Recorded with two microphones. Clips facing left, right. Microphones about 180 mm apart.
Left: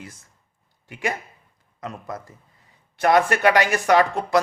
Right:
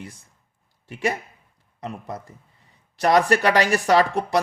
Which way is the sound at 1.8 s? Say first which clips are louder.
Even; 30° right (ahead or behind).